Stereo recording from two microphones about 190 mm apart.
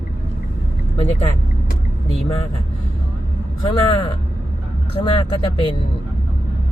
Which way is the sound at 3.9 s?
30° left (ahead or behind).